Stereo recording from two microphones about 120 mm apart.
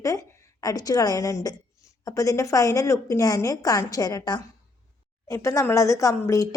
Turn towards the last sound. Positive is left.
turn(degrees=25)  # may be behind; listen again after turning